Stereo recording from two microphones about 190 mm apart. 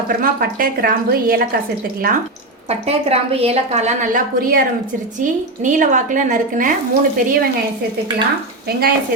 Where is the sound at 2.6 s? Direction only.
35° right (ahead or behind).